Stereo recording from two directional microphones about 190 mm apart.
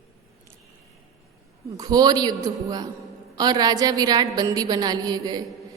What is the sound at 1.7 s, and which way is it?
A woman's voice, 20° right (ahead or behind).